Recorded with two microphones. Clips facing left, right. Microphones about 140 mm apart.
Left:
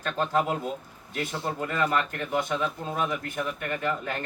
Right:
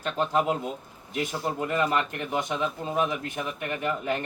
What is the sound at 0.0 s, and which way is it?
Speech, 15° right (ahead or behind).